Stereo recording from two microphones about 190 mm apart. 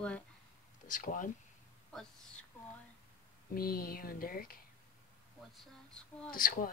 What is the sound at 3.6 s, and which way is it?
Speech, 50° left (ahead or behind).